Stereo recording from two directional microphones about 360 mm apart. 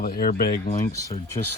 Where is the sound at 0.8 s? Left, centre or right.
Centre.